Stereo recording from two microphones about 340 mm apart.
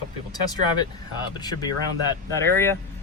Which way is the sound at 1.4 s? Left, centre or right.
Centre.